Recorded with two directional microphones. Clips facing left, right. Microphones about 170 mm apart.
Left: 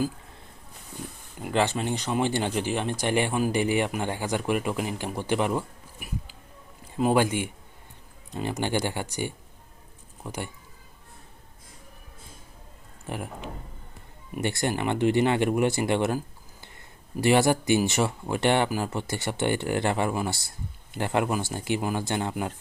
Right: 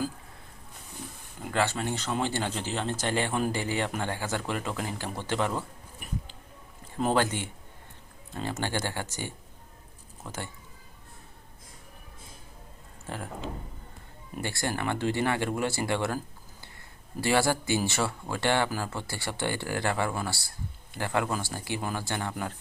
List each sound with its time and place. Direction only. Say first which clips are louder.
1.4 s speech: left 3 dB; 20° left (ahead or behind)
13.1 s speech: left 2 dB; 15° left (ahead or behind)